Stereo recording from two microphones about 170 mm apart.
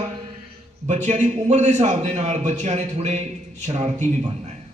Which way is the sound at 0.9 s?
45° right (ahead or behind).